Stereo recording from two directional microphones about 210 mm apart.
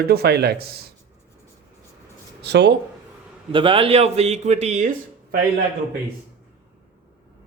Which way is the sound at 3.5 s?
25° right (ahead or behind).